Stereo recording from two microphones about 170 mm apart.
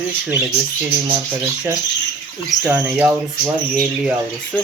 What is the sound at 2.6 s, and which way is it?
Speech, 10° right (ahead or behind).